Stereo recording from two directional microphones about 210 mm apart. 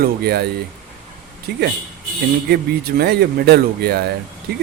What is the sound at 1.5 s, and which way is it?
Speech, 50° right (ahead or behind).